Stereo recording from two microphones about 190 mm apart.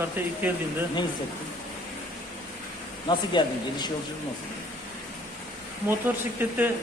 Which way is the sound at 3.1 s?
25° left (ahead or behind).